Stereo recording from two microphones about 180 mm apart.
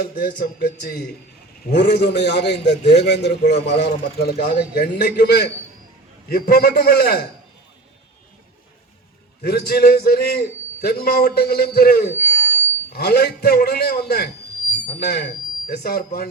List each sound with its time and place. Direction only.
0.0 s a man's voice: 60° left (ahead or behind)
9.4 s a man's voice: 65° left (ahead or behind)